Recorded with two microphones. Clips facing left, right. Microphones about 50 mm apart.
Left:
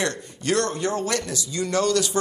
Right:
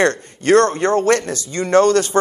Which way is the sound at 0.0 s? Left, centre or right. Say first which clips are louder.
Right 10 dB; right.